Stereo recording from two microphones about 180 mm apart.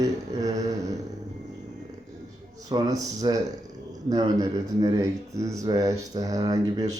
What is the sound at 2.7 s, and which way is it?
Speech, 20° right (ahead or behind).